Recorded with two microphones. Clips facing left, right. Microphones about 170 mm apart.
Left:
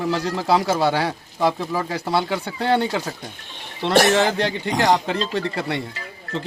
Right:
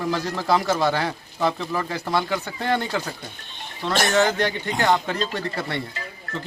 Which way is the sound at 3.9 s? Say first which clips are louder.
Left 4 dB; 75° left (ahead or behind).